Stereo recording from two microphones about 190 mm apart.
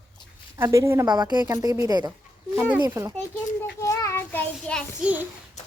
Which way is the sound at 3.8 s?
15° left (ahead or behind).